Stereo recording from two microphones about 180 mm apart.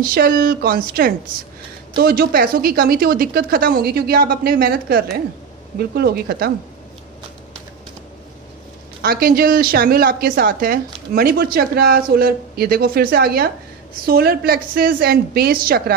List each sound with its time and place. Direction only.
0.0 s a woman's voice: 55° right (ahead or behind)
9.0 s a woman's voice: 55° right (ahead or behind)